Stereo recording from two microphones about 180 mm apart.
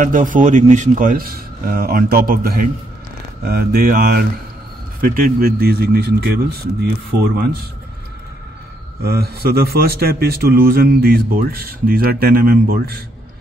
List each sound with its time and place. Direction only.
0.0 s a man's voice: 45° right (ahead or behind)
9.0 s a man's voice: 60° right (ahead or behind)